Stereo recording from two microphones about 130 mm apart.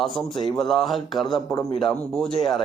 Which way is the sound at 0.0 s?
Centre (ahead or behind).